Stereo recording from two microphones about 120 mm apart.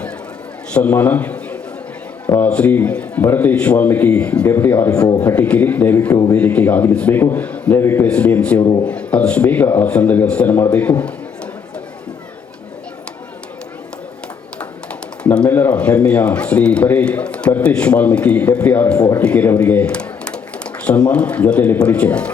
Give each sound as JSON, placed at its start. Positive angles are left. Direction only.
{"t": 0.7, "sound": "a man's voice", "side_deg": 10}
{"t": 8.6, "sound": "a man's voice", "side_deg": 35}
{"t": 8.9, "sound": "a man's voice", "side_deg": 10}
{"t": 15.2, "sound": "a sound", "side_deg": 10}
{"t": 15.4, "sound": "a man's voice", "side_deg": 15}